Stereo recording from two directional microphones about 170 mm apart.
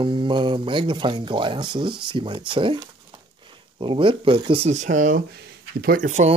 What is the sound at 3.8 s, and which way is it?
Speech, 30° right (ahead or behind).